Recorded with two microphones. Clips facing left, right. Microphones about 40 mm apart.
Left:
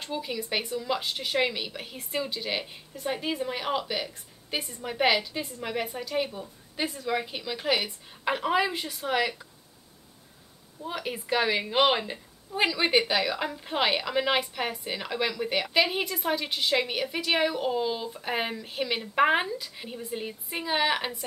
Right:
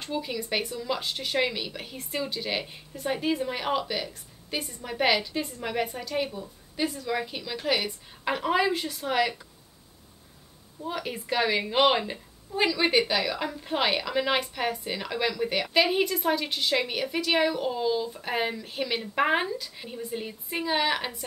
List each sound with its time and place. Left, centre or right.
0.0 s a woman's voice: centre
10.8 s a woman's voice: centre